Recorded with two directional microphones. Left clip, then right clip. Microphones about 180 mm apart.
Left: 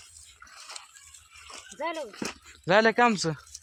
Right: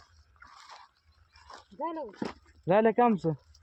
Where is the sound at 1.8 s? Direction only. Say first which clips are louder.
Left 3 dB; 20° right (ahead or behind).